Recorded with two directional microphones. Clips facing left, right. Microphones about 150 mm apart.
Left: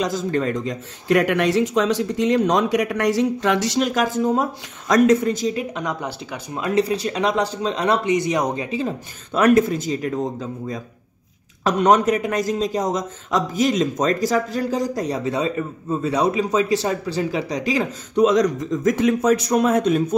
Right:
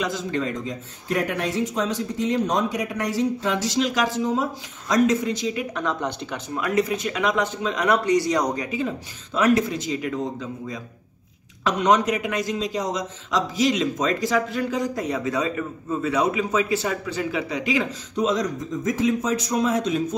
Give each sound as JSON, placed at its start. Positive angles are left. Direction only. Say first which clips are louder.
{"t": 0.0, "sound": "speech", "louder": "left 4 dB", "side_deg": 45}
{"t": 0.7, "sound": "speech", "louder": "left 7 dB", "side_deg": 80}
{"t": 5.8, "sound": "speech", "louder": "right 1 dB", "side_deg": 10}
{"t": 6.5, "sound": "speech", "louder": "left 3 dB", "side_deg": 30}
{"t": 9.3, "sound": "speech", "louder": "left 4 dB", "side_deg": 55}
{"t": 11.6, "sound": "a man's voice", "louder": "left 3 dB", "side_deg": 45}
{"t": 18.1, "sound": "speech", "louder": "left 7 dB", "side_deg": 65}